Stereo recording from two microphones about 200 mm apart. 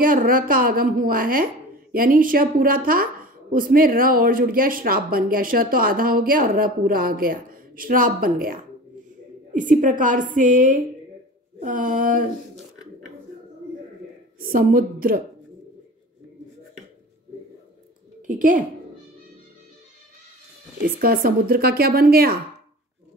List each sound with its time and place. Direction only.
0.0 s a woman's voice: 45° right (ahead or behind)
14.4 s speech: 45° right (ahead or behind)
18.2 s a woman's voice: 40° right (ahead or behind)
21.0 s speech: 45° right (ahead or behind)